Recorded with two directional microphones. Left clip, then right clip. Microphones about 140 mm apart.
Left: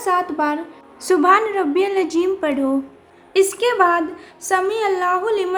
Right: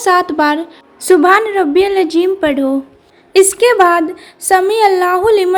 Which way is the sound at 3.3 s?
40° right (ahead or behind).